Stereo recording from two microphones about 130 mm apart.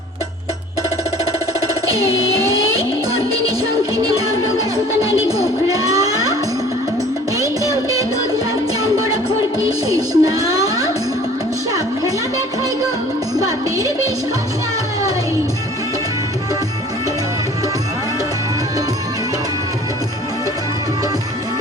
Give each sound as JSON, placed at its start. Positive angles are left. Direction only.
{"t": 5.6, "sound": "a sound", "side_deg": -30}
{"t": 7.7, "sound": "music", "side_deg": -25}
{"t": 9.9, "sound": "music", "side_deg": -25}
{"t": 13.4, "sound": "music", "side_deg": -25}